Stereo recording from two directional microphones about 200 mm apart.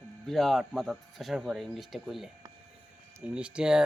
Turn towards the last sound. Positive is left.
turn(degrees=-5)  # may be behind; listen again after turning